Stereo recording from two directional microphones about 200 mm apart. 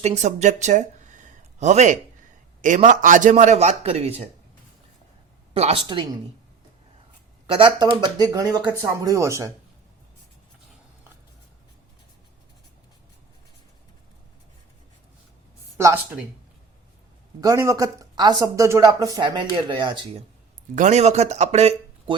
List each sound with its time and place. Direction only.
0.0 s a man's voice: 35° right (ahead or behind)
5.5 s speech: 30° right (ahead or behind)
7.4 s speech: 25° right (ahead or behind)
17.4 s speech: 15° right (ahead or behind)
20.7 s a man's voice: 35° right (ahead or behind)